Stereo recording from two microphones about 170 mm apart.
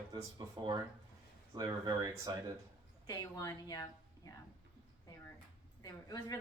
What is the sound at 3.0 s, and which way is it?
A woman's voice, 20° left (ahead or behind).